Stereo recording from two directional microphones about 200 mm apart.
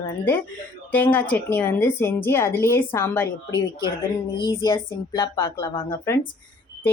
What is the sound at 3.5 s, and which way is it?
Speech, 20° left (ahead or behind).